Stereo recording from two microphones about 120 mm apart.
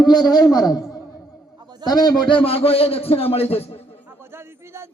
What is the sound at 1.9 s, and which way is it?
A man's voice, 35° left (ahead or behind).